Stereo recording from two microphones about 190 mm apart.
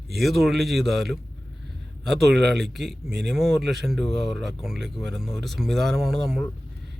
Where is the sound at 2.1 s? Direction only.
60° right (ahead or behind).